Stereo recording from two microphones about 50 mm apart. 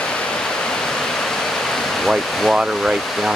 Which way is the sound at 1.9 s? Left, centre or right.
Centre.